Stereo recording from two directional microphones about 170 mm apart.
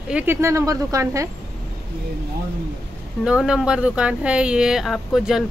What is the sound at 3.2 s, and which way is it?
Speech, 5° right (ahead or behind).